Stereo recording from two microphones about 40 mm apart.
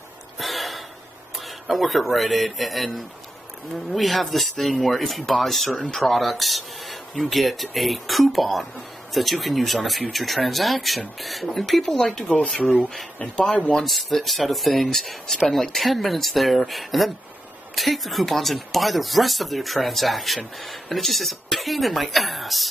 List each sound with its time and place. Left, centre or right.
0.4 s gasp: centre
1.4 s speech: centre
5.7 s speech: centre
13.4 s speech: left
13.8 s speech: centre